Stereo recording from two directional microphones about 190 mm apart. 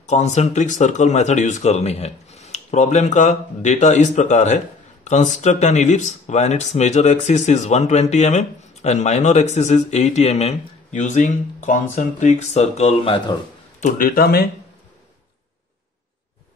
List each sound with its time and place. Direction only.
0.0 s speech: 35° left (ahead or behind); by 14.5 s 55° left (ahead or behind)